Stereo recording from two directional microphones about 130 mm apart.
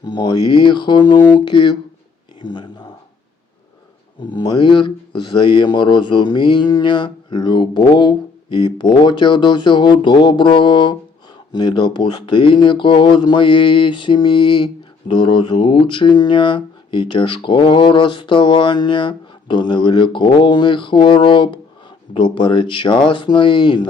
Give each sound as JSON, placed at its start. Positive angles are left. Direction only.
{"t": 0.0, "sound": "speech", "side_deg": 35}
{"t": 4.2, "sound": "speech", "side_deg": 35}